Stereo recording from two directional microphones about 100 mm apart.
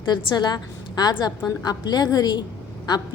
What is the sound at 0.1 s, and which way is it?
A woman's voice, 45° left (ahead or behind).